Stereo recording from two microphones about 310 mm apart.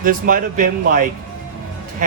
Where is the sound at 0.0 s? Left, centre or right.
Right.